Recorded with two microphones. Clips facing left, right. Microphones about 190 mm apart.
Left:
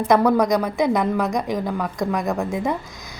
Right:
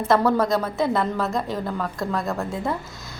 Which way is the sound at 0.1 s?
15° left (ahead or behind).